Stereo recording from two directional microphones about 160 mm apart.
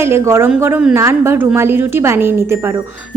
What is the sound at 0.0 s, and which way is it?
A woman's voice, 15° right (ahead or behind).